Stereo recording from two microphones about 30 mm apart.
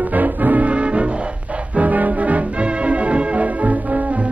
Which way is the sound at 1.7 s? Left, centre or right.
Right.